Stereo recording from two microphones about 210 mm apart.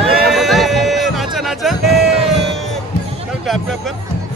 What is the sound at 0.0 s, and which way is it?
Music, centre (ahead or behind).